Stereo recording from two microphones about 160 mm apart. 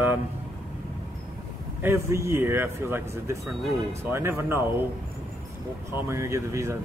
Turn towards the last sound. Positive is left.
turn(degrees=-20)  # may be behind; listen again after turning